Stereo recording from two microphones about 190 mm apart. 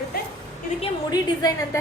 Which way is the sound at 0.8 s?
20° left (ahead or behind).